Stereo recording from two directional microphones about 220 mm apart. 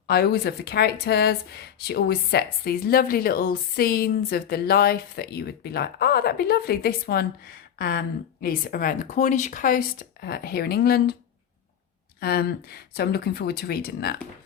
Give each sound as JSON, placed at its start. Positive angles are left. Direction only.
{"t": 0.1, "sound": "speech", "side_deg": 45}
{"t": 12.2, "sound": "speech", "side_deg": 45}